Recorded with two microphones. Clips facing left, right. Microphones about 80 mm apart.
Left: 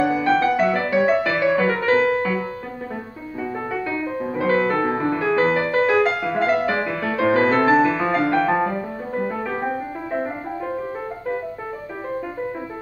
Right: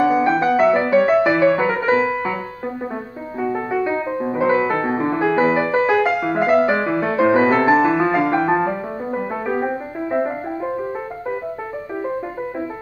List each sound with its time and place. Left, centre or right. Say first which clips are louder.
0.1 s music: right 2 dB; centre
3.8 s music: right 4 dB; right